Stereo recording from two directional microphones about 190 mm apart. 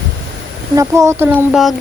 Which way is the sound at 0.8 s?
15° right (ahead or behind).